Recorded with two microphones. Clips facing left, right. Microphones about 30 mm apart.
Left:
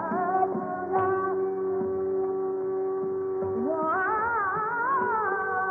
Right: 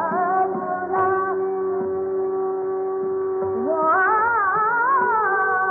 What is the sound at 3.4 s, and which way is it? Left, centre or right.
Music, centre.